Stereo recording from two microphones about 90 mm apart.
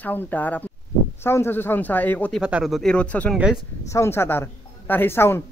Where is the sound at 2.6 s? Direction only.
Centre (ahead or behind).